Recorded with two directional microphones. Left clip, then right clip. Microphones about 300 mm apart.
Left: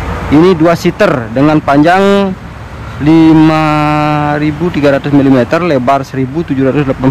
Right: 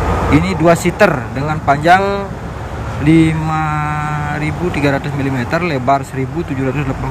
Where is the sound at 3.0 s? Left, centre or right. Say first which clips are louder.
Left 8 dB; centre.